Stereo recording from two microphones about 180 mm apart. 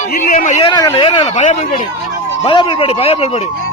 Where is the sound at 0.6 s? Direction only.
25° left (ahead or behind).